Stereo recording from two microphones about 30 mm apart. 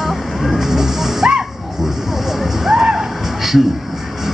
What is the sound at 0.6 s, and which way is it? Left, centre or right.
Music, centre.